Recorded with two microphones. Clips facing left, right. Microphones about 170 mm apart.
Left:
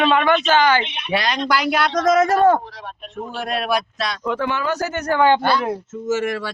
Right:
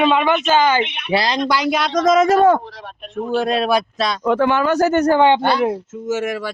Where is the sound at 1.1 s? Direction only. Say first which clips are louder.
Right 3 dB; 30° right (ahead or behind).